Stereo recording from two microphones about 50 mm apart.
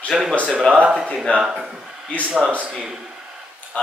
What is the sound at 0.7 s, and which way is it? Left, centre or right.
Speech, right.